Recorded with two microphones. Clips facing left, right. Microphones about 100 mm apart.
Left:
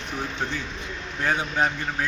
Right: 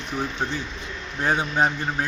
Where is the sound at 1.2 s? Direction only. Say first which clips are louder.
Right 2 dB; 25° right (ahead or behind).